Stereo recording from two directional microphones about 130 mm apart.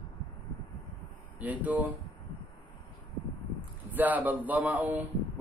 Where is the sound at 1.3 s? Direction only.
10° right (ahead or behind).